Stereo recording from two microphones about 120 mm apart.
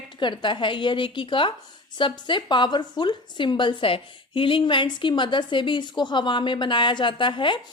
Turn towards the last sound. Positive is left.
turn(degrees=45)  # may be behind; listen again after turning